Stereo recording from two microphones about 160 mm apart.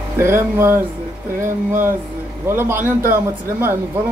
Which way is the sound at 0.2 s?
15° right (ahead or behind).